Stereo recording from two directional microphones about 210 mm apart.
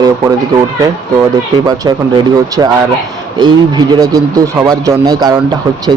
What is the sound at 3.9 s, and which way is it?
Speech, 20° right (ahead or behind).